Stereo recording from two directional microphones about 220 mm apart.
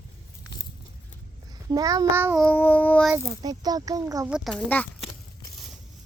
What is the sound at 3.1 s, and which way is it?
A child's voice, 15° right (ahead or behind).